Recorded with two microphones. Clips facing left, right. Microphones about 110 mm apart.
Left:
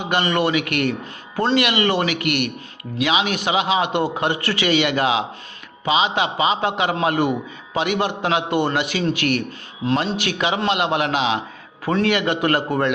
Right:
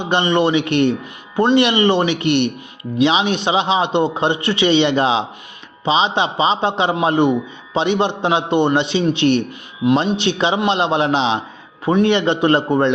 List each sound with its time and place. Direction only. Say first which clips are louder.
0.0 s speech: right 4 dB; 25° right (ahead or behind)